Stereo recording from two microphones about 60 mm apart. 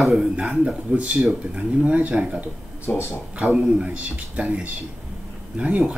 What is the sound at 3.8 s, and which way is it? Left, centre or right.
Speech, right.